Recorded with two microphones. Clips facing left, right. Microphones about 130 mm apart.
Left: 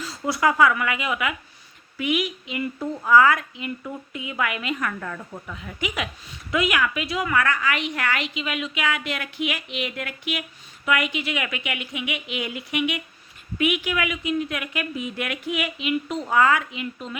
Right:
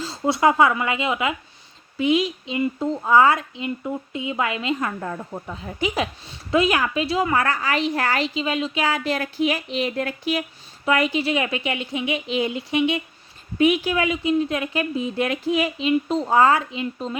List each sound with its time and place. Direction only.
0.0 s speech: 25° right (ahead or behind)